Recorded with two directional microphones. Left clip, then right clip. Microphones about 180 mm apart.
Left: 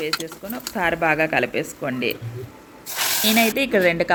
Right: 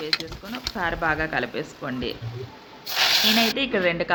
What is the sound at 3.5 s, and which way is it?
Speech, 20° left (ahead or behind).